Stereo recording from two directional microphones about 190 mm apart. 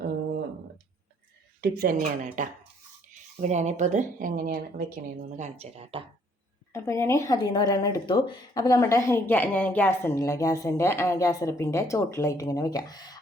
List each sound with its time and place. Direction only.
1.6 s speech: 50° right (ahead or behind)
5.4 s speech: 35° right (ahead or behind)
6.7 s speech: 15° left (ahead or behind)